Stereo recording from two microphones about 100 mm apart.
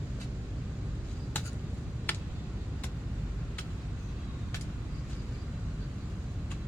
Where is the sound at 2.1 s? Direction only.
20° left (ahead or behind).